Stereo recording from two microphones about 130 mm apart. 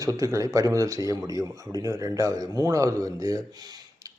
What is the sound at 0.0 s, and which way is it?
A man's voice, 25° right (ahead or behind).